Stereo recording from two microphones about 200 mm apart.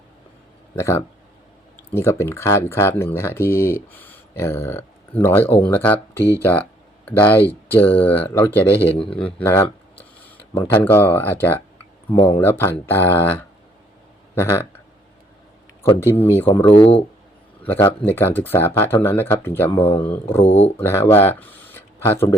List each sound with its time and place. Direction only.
0.8 s speech: 15° left (ahead or behind)
9.0 s speech: 25° left (ahead or behind)
9.4 s speech: 10° left (ahead or behind)
15.8 s speech: 10° left (ahead or behind)
17.7 s speech: 10° left (ahead or behind)
20.4 s speech: 30° left (ahead or behind)
20.8 s speech: 10° left (ahead or behind)